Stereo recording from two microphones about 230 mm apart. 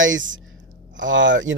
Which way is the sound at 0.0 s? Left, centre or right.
Right.